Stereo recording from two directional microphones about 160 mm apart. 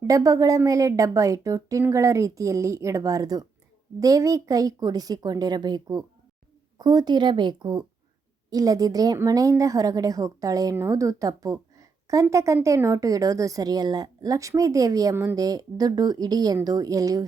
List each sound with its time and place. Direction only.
0.0 s speech: 20° right (ahead or behind)